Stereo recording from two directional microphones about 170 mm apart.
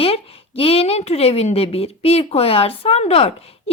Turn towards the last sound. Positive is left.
turn(degrees=35)  # may be behind; listen again after turning